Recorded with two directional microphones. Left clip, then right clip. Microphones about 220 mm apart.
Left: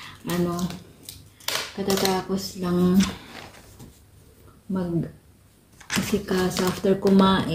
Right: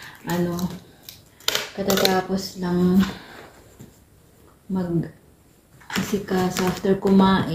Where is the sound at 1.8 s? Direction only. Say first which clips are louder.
Right 4 dB; centre (ahead or behind).